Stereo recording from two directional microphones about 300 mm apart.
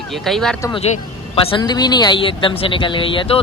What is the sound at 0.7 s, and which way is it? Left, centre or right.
Speech, centre.